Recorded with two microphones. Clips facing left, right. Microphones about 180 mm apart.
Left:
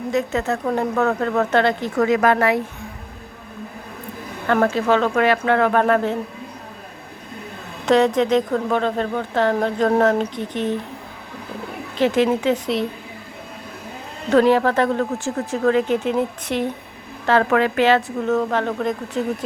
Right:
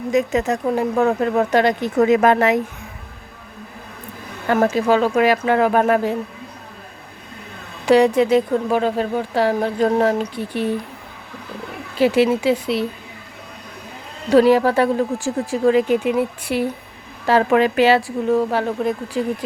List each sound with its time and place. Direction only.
0.1 s speech: 15° right (ahead or behind)
4.4 s speech: 10° right (ahead or behind)
7.9 s speech: 10° right (ahead or behind)
11.9 s speech: 10° right (ahead or behind)
14.3 s speech: 10° right (ahead or behind)